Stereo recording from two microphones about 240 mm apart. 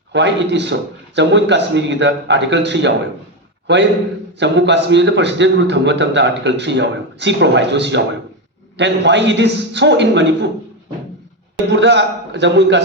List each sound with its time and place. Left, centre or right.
0.1 s a man's voice: right
11.7 s a man's voice: right